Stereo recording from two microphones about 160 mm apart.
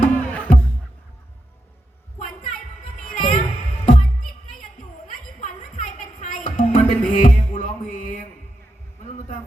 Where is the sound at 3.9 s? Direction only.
50° left (ahead or behind).